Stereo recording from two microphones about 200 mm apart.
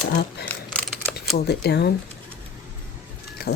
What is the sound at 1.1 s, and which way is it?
Speech, 55° left (ahead or behind).